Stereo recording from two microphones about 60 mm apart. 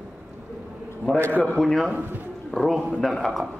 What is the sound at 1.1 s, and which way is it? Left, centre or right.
Speech, left.